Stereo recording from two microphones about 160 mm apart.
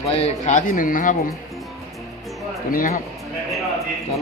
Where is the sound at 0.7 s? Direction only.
55° left (ahead or behind).